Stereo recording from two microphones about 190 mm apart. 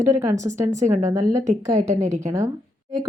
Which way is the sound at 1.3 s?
40° right (ahead or behind).